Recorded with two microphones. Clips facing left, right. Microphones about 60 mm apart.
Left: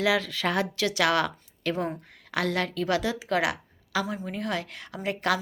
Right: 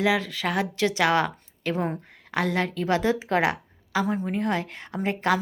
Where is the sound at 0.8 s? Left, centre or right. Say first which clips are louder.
Right 4 dB; right.